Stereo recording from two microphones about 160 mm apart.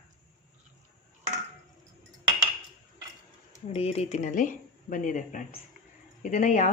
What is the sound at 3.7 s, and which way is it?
Speech, 40° left (ahead or behind).